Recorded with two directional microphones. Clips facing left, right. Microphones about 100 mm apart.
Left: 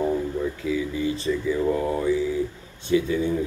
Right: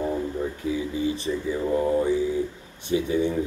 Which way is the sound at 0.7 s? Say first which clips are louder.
Even; 25° right (ahead or behind).